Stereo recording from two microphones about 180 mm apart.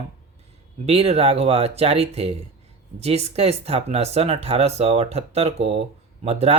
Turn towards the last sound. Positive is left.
turn(degrees=-35)  # may be behind; listen again after turning